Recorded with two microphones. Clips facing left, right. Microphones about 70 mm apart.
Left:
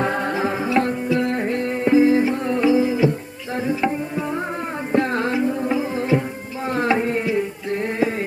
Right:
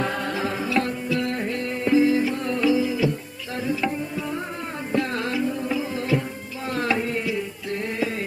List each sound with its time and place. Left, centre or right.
0.0 s music: left
3.7 s tabla: left
4.9 s music: left
6.7 s a sound: left